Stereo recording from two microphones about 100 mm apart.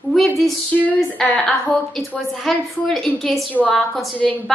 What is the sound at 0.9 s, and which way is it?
A woman's voice, 10° left (ahead or behind).